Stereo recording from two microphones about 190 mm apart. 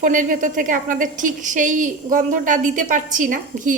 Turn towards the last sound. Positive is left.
turn(degrees=-45)  # may be behind; listen again after turning